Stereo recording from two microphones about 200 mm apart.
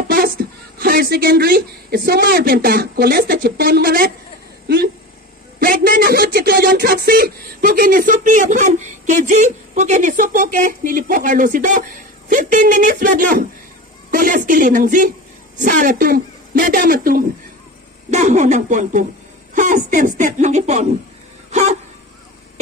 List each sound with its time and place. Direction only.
0.1 s a woman's voice: 45° right (ahead or behind)
21.5 s hiccup: 35° right (ahead or behind)